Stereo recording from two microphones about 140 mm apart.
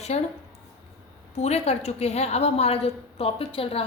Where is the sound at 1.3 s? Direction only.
50° left (ahead or behind).